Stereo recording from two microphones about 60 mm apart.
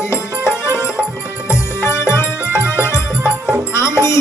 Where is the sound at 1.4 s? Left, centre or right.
Left.